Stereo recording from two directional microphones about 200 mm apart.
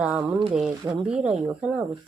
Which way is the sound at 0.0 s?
5° right (ahead or behind).